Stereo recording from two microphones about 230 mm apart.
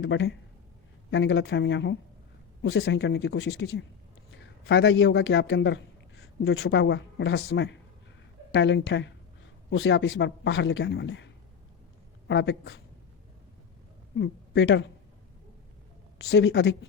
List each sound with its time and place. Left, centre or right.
0.0 s a man's voice: left
12.3 s a man's voice: left
14.2 s a woman's voice: left
16.1 s a man's voice: left